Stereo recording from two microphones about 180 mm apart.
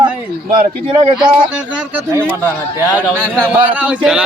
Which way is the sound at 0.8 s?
30° right (ahead or behind).